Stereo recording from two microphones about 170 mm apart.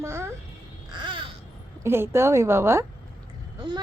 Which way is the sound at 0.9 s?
30° right (ahead or behind).